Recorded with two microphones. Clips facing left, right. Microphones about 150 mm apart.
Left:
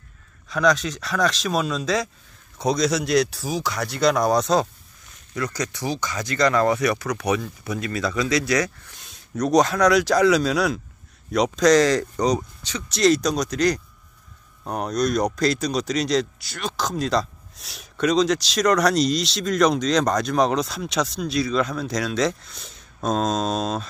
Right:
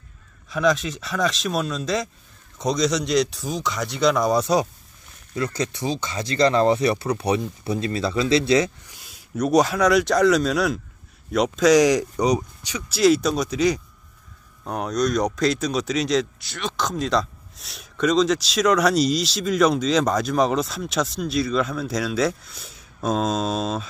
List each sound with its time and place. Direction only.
0.5 s speech: 5° right (ahead or behind)
5.3 s speech: 25° right (ahead or behind)
8.8 s speech: 10° right (ahead or behind)